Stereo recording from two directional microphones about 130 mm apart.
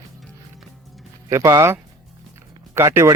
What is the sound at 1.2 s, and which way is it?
Speech, 25° right (ahead or behind).